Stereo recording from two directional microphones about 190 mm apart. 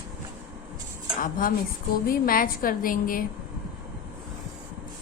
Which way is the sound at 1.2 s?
45° left (ahead or behind).